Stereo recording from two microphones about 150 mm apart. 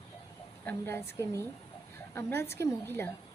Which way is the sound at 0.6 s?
15° left (ahead or behind).